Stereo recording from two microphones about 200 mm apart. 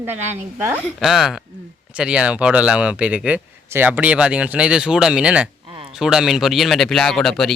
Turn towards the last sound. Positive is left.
turn(degrees=0)  # may be behind; listen again after turning